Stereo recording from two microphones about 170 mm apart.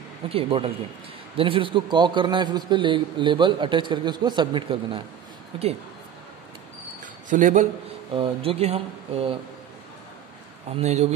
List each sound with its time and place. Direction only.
0.3 s a man's voice: 35° right (ahead or behind)
7.2 s a man's voice: 50° right (ahead or behind)
8.1 s speech: 30° right (ahead or behind)
10.8 s speech: 40° right (ahead or behind)